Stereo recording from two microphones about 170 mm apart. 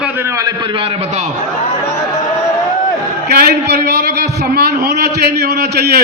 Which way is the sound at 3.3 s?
65° right (ahead or behind).